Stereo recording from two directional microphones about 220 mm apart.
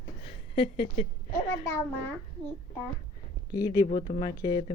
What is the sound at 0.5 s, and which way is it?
Speech, 25° left (ahead or behind).